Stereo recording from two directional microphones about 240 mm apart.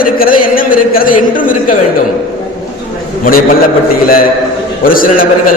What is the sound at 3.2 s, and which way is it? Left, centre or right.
Speech, left.